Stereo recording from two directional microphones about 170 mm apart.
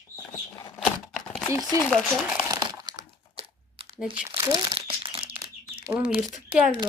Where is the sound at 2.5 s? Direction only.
25° right (ahead or behind).